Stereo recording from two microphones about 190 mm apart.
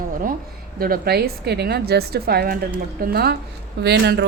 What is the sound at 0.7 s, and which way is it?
Speech, 50° right (ahead or behind).